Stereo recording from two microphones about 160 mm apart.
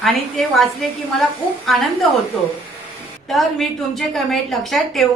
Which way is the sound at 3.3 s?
Centre (ahead or behind).